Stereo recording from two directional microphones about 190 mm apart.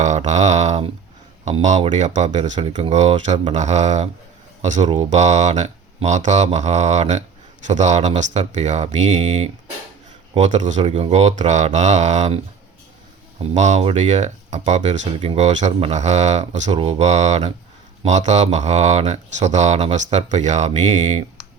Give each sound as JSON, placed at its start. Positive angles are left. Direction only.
{"t": 0.3, "sound": "speech", "side_deg": -35}
{"t": 13.4, "sound": "speech", "side_deg": -40}